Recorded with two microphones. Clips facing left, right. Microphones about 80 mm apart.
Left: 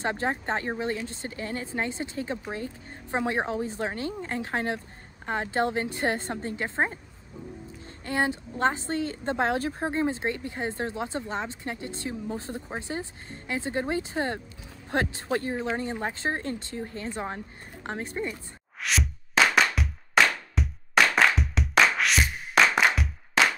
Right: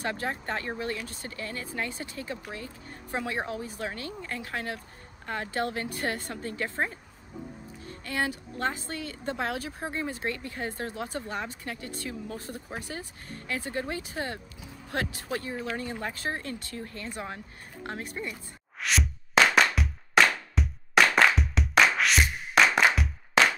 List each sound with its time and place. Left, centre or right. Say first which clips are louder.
0.0 s speech: left 4 dB; left
8.0 s speech: left 4 dB; left
18.3 s music: left 2 dB; centre